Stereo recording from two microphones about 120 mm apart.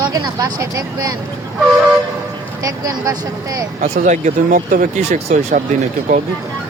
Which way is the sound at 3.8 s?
90° right.